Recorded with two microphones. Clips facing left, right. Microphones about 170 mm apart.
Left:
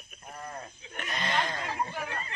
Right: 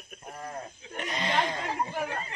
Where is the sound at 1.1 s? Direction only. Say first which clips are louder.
Right 2 dB; 20° right (ahead or behind).